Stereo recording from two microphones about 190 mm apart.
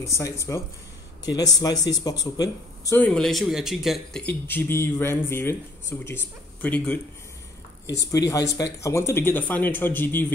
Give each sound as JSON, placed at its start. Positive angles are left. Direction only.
{"t": 0.0, "sound": "speech", "side_deg": 15}
{"t": 3.1, "sound": "speech", "side_deg": 0}
{"t": 8.0, "sound": "speech", "side_deg": 15}